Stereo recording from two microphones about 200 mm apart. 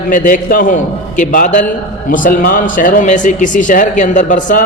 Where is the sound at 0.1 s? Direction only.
45° left (ahead or behind).